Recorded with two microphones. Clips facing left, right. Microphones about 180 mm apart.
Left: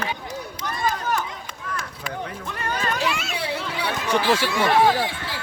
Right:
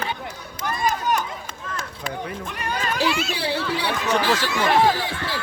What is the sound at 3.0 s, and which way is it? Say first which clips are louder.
Children playing: right 3 dB; 35° right (ahead or behind).